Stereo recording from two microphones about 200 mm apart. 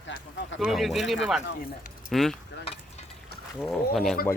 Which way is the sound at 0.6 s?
Centre (ahead or behind).